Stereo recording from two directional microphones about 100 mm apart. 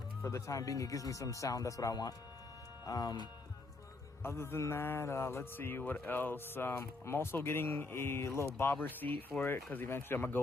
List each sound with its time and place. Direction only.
0.3 s speech: 30° left (ahead or behind)
4.2 s speech: 25° left (ahead or behind)